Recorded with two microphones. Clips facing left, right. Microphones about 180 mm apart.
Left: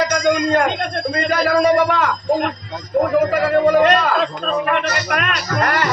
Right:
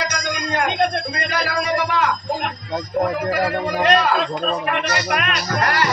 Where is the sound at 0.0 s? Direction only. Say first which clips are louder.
Left 9 dB; 55° left (ahead or behind).